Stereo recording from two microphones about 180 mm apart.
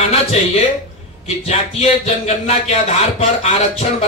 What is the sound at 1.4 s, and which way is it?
A man's voice, 35° left (ahead or behind).